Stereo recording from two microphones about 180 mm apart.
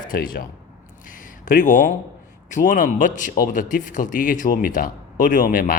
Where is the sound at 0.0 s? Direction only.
50° left (ahead or behind).